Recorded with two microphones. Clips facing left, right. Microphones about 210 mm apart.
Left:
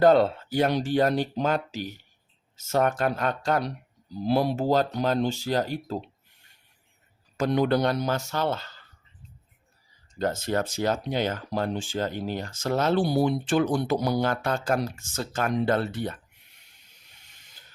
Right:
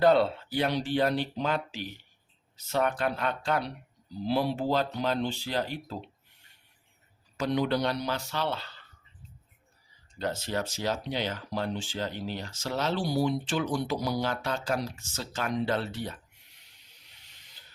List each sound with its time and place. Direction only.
0.0 s speech: 45° left (ahead or behind)
7.3 s speech: 50° left (ahead or behind)
10.2 s speech: 45° left (ahead or behind)
17.2 s printer: 50° left (ahead or behind)